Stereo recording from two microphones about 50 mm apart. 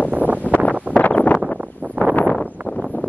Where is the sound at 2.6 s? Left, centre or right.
Right.